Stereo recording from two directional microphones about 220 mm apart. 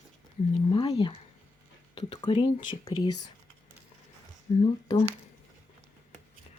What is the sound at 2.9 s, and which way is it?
Speech, 90° left.